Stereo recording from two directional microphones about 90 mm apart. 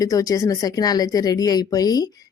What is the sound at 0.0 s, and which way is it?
Speech, 40° left (ahead or behind).